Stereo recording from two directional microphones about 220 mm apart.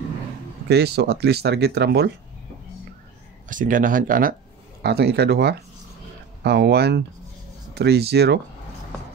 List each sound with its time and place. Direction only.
0.7 s speech: 50° right (ahead or behind)
3.4 s speech: 35° right (ahead or behind)